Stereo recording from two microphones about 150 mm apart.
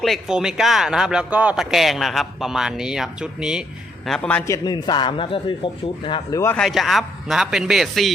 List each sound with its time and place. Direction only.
0.0 s a man's voice: centre (ahead or behind)
4.4 s a man's voice: 25° left (ahead or behind)
6.6 s speech: centre (ahead or behind)